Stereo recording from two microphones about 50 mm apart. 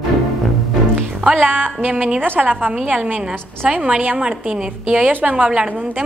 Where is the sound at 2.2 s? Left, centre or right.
Right.